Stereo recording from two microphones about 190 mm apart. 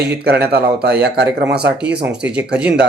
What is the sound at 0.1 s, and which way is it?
Speech, 55° right (ahead or behind).